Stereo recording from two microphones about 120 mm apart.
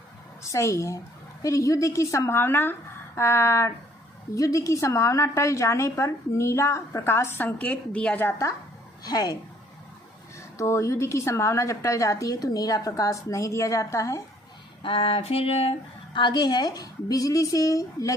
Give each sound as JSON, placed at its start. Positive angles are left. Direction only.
{"t": 0.5, "sound": "a woman's voice", "side_deg": 25}
{"t": 9.0, "sound": "a woman's voice", "side_deg": 30}
{"t": 10.6, "sound": "a woman's voice", "side_deg": 25}
{"t": 14.8, "sound": "a sound", "side_deg": 50}
{"t": 16.1, "sound": "a woman's voice", "side_deg": 40}